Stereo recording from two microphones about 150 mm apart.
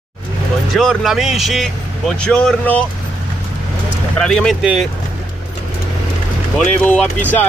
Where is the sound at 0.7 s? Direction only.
Centre (ahead or behind).